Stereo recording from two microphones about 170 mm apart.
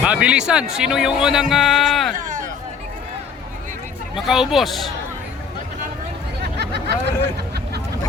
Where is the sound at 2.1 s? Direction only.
50° right (ahead or behind).